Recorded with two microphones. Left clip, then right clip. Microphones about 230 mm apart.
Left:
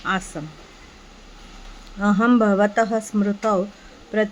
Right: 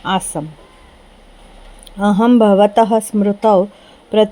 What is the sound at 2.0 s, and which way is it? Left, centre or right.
Speech, right.